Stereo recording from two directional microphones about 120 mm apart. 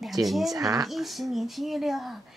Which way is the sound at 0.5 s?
30° right (ahead or behind).